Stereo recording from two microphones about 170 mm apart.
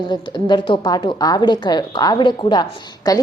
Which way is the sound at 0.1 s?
25° left (ahead or behind).